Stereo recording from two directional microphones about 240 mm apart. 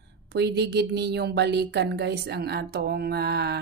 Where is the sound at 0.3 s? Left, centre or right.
Right.